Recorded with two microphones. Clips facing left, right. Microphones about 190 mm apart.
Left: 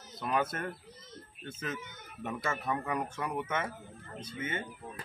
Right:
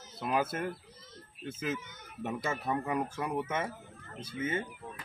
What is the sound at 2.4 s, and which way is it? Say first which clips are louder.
Speech: even; 25° right (ahead or behind).